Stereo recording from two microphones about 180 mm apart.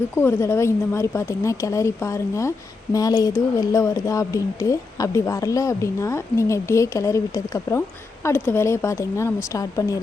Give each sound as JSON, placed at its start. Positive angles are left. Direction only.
{"t": 0.2, "sound": "speech", "side_deg": 15}